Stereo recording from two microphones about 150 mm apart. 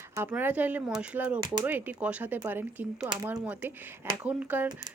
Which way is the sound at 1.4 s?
25° right (ahead or behind).